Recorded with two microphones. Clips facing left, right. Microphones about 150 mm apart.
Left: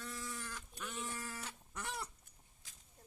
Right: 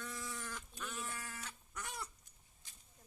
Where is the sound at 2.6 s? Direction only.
90° left.